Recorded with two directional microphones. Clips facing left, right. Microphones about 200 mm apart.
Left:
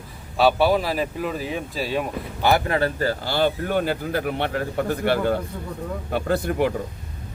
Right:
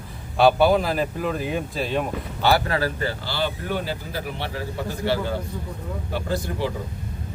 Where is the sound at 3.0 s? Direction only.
45° left (ahead or behind).